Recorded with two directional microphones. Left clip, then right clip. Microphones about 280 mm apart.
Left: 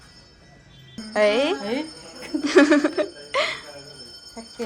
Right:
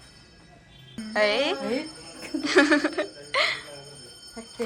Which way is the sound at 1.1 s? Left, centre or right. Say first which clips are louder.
Left 4 dB; centre.